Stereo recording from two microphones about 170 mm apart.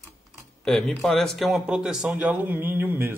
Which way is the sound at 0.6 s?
5° left (ahead or behind).